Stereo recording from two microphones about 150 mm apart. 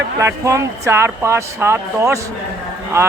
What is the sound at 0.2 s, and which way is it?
A man's voice, 20° right (ahead or behind).